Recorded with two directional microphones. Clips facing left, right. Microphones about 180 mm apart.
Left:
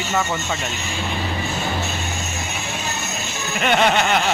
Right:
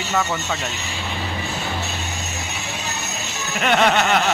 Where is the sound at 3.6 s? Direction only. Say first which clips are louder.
Even; centre (ahead or behind).